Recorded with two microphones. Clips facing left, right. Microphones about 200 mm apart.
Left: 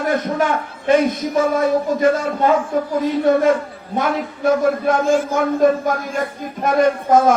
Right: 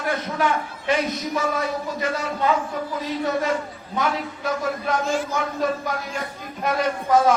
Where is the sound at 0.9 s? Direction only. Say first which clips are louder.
Left 8 dB; 50° left (ahead or behind).